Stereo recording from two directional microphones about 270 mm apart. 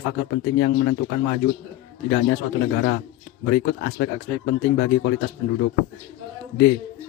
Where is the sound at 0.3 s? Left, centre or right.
Left.